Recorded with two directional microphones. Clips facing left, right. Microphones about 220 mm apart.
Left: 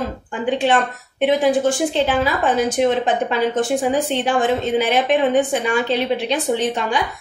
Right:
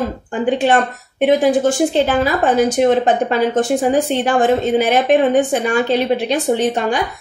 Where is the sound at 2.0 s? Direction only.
45° right (ahead or behind).